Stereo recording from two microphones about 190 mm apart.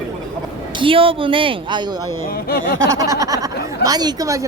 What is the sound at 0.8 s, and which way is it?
A woman's voice, 30° right (ahead or behind).